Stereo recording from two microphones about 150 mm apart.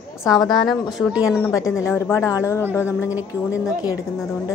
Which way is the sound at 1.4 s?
20° left (ahead or behind).